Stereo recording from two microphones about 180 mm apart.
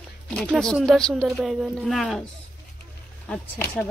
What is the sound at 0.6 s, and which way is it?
A woman's voice, centre (ahead or behind).